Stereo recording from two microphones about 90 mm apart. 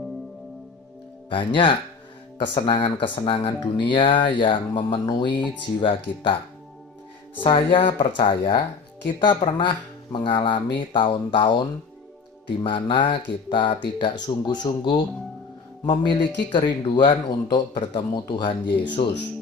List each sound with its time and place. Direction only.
1.3 s speech: 70° left (ahead or behind)
7.4 s speech: 70° left (ahead or behind)
12.6 s speech: 65° left (ahead or behind)
16.5 s speech: 70° left (ahead or behind)